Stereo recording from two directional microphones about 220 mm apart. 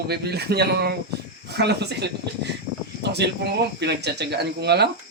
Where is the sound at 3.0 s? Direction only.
50° right (ahead or behind).